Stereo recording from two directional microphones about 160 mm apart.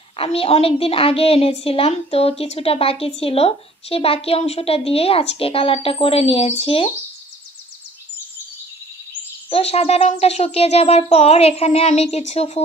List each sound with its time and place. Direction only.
0.1 s a woman's voice: 35° left (ahead or behind)
9.5 s a woman's voice: 40° left (ahead or behind)